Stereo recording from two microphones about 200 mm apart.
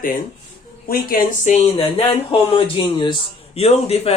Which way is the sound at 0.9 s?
45° left (ahead or behind).